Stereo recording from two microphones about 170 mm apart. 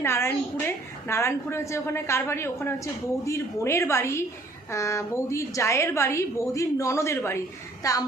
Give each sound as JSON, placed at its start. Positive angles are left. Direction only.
{"t": 0.0, "sound": "a sound", "side_deg": 15}
{"t": 1.0, "sound": "a woman's voice", "side_deg": 15}
{"t": 7.8, "sound": "child singing", "side_deg": 20}